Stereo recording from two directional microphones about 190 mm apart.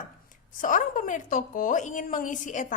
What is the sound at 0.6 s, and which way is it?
A woman's voice, 45° left (ahead or behind).